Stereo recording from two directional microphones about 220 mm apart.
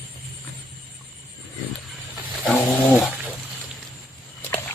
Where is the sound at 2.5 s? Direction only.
Centre (ahead or behind).